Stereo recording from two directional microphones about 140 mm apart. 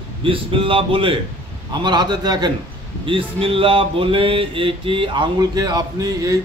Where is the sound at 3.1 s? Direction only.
40° right (ahead or behind).